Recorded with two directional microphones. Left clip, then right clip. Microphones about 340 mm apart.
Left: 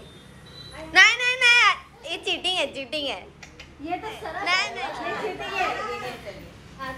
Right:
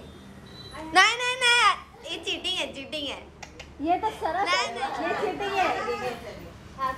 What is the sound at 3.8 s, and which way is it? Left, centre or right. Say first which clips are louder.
Speech: right 6 dB; right.